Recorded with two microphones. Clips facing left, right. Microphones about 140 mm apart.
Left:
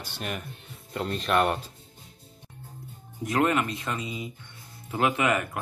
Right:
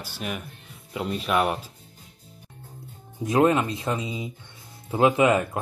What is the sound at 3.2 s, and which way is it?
Speech, 25° right (ahead or behind).